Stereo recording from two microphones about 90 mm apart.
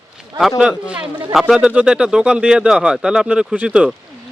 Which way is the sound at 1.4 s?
5° right (ahead or behind).